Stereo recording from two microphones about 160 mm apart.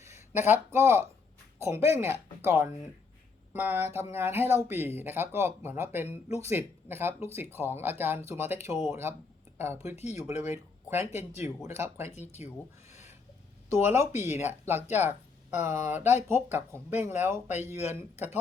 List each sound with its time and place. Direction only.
0.0 s speech: 15° right (ahead or behind)
11.3 s speech: 45° left (ahead or behind)
11.8 s speech: 15° right (ahead or behind)
12.5 s rub: 20° right (ahead or behind)
13.7 s speech: 15° right (ahead or behind)